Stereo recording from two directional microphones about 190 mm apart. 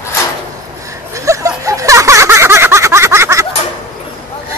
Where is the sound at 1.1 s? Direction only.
15° right (ahead or behind).